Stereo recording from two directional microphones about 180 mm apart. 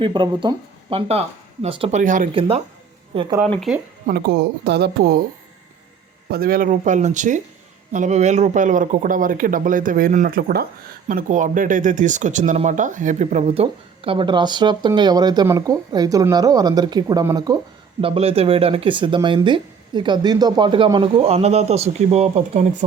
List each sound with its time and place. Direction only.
0.0 s speech: 25° right (ahead or behind)
2.0 s speech: 45° right (ahead or behind)
3.4 s speech: centre (ahead or behind)
4.0 s speech: 65° right (ahead or behind)
6.3 s speech: 55° right (ahead or behind)
11.1 s speech: 45° right (ahead or behind); by 17.6 s 20° right (ahead or behind)
18.0 s speech: 30° right (ahead or behind)